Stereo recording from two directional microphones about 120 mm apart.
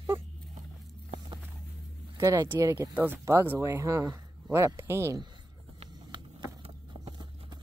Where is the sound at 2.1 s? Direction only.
25° right (ahead or behind).